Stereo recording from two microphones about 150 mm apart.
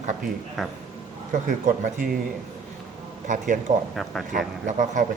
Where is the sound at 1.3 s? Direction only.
60° right (ahead or behind).